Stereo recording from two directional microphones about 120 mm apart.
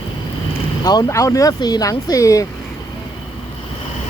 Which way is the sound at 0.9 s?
30° left (ahead or behind).